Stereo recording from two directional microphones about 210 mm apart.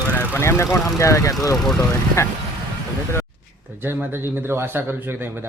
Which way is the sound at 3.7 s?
10° right (ahead or behind).